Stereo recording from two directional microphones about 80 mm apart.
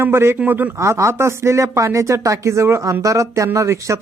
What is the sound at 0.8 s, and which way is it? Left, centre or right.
Speech, right.